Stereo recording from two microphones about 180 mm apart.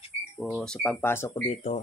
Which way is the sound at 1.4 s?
35° left (ahead or behind).